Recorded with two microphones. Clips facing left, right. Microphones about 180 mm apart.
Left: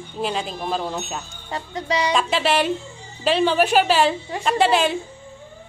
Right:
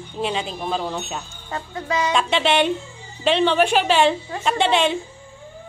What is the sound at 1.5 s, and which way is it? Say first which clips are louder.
Speech: left 1 dB; 15° left (ahead or behind).